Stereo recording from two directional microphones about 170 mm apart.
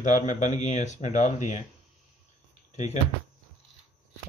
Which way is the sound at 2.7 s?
40° left (ahead or behind).